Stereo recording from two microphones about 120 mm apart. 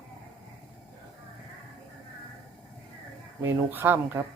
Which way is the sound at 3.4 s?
20° right (ahead or behind).